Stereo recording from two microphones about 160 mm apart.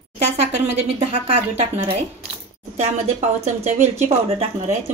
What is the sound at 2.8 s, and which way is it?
Speech, 45° right (ahead or behind).